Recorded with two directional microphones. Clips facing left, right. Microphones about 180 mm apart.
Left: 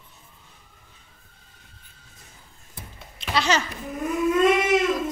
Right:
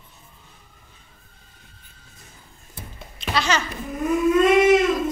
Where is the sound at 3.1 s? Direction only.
30° left (ahead or behind).